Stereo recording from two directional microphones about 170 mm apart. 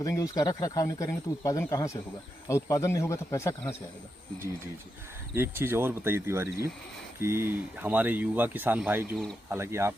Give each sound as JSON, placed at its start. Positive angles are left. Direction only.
{"t": 0.0, "sound": "speech", "side_deg": 20}
{"t": 5.3, "sound": "speech", "side_deg": -15}